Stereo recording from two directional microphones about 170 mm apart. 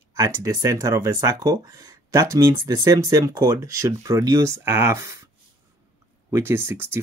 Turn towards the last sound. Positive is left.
turn(degrees=-10)  # may be behind; listen again after turning